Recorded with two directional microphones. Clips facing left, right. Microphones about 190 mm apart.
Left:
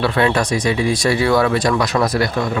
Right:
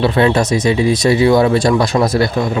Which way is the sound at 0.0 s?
20° right (ahead or behind).